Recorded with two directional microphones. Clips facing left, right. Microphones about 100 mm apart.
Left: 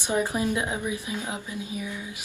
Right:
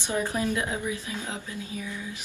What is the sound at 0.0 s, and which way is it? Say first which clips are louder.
Speech: left 2 dB; 15° left (ahead or behind).